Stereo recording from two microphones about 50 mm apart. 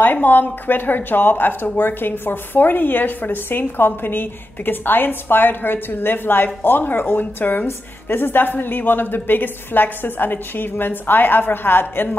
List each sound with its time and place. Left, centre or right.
0.0 s speech: left